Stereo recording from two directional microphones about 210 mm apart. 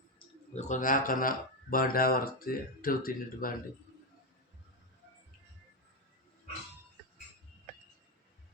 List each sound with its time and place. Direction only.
0.5 s speech: 35° left (ahead or behind)